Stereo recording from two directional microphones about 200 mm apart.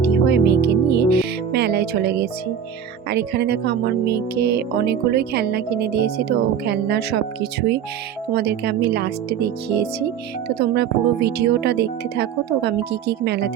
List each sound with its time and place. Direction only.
0.0 s speech: 55° right (ahead or behind)
8.3 s speech: 55° right (ahead or behind)